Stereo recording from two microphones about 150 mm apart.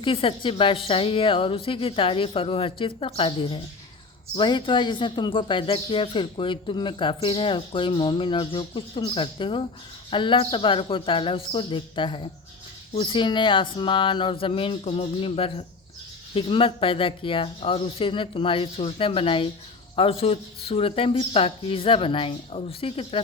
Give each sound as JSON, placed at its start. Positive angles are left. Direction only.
{"t": 0.0, "sound": "speech", "side_deg": 35}